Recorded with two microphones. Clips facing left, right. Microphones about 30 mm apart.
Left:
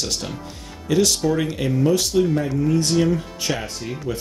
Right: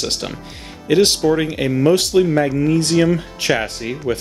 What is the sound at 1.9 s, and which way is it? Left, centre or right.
Speech, right.